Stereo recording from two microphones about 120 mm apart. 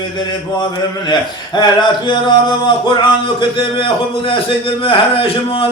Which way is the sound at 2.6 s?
40° left (ahead or behind).